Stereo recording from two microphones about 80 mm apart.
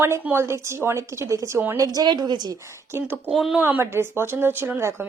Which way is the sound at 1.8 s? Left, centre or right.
Right.